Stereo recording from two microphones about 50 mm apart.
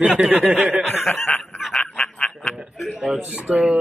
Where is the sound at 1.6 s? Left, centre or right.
Centre.